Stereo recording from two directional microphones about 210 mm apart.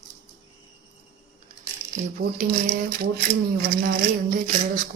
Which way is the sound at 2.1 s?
40° right (ahead or behind).